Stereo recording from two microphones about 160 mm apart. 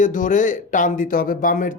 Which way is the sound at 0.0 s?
55° left (ahead or behind).